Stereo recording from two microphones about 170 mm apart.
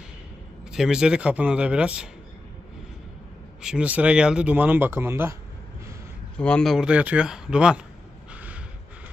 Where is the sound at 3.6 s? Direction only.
5° right (ahead or behind).